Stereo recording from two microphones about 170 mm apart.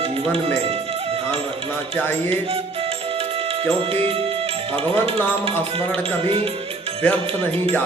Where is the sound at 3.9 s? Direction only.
35° right (ahead or behind).